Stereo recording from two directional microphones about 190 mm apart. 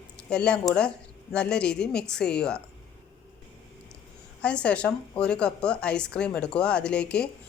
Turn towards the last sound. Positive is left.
turn(degrees=5)  # may be behind; listen again after turning